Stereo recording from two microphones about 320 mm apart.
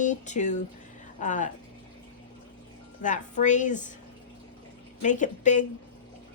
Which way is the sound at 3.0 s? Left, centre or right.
Left.